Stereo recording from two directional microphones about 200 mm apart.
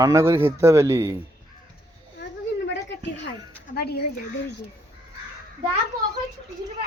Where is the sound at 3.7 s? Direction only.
55° left (ahead or behind).